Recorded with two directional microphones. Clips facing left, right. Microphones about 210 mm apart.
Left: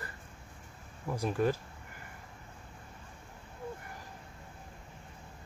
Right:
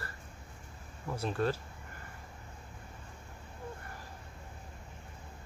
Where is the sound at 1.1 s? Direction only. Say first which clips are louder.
Left 2 dB; 15° left (ahead or behind).